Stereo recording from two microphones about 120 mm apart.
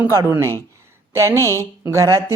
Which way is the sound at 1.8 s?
25° right (ahead or behind).